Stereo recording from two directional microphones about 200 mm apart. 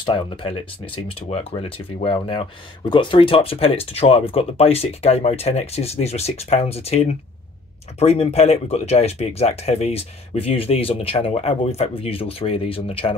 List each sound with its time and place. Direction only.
0.0 s speech: 25° left (ahead or behind)